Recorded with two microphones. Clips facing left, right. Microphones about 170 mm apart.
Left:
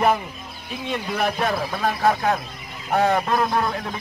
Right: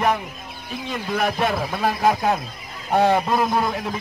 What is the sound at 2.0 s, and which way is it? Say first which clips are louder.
Speech: even; 15° right (ahead or behind).